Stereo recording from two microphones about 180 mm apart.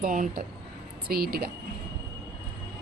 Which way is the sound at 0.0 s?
50° right (ahead or behind).